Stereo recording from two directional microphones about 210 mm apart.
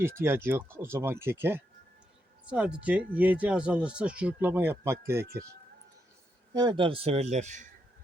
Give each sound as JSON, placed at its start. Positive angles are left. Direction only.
{"t": 0.0, "sound": "speech", "side_deg": -10}
{"t": 6.5, "sound": "speech", "side_deg": -20}